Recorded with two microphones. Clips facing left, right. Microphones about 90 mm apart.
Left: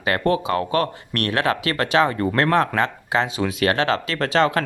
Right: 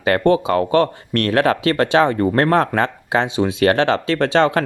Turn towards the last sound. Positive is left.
turn(degrees=-35)  # may be behind; listen again after turning